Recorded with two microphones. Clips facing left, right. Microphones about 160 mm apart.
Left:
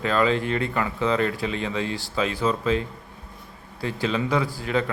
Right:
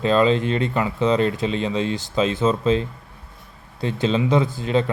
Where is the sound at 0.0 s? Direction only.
20° right (ahead or behind).